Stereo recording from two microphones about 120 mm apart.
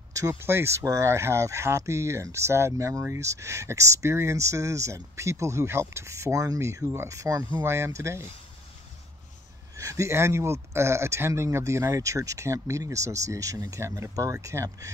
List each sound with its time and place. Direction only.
0.1 s speech: 25° right (ahead or behind)
9.8 s speech: 25° right (ahead or behind)